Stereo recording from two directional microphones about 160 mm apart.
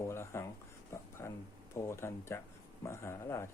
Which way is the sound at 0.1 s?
15° left (ahead or behind).